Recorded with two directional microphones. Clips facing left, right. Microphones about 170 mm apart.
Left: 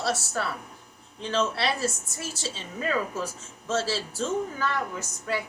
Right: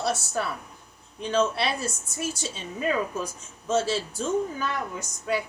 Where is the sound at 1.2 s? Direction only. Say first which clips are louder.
Right 3 dB; 15° right (ahead or behind).